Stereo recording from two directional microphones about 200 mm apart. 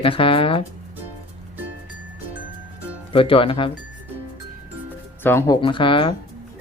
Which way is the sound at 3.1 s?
25° left (ahead or behind).